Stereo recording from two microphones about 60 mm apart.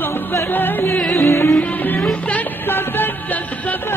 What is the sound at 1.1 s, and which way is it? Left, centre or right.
Music, left.